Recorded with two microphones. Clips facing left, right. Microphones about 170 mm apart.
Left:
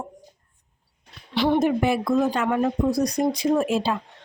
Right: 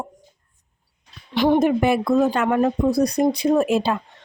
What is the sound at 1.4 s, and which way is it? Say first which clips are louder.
Speech: right 3 dB; 55° right (ahead or behind).